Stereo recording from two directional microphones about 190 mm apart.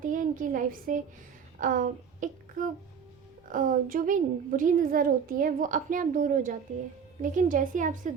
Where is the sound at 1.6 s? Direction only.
45° right (ahead or behind).